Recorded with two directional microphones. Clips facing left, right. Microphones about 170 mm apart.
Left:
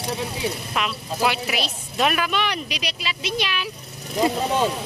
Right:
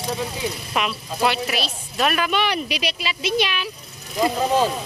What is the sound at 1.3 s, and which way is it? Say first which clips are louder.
Speech: right 2 dB; 10° left (ahead or behind).